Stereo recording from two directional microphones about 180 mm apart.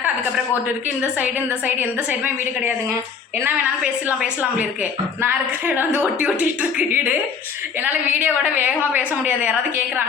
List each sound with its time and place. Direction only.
1.2 s a woman's voice: 10° right (ahead or behind)